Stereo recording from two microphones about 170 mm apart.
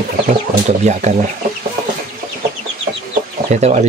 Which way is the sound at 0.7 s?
45° right (ahead or behind).